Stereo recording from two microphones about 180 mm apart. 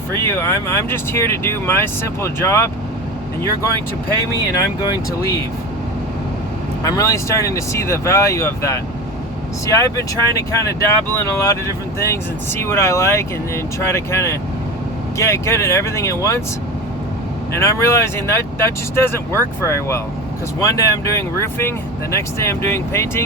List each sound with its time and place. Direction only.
0.1 s speech: 15° left (ahead or behind)
4.8 s speech: 15° left (ahead or behind)
6.8 s speech: 20° left (ahead or behind)
17.5 s speech: 15° left (ahead or behind)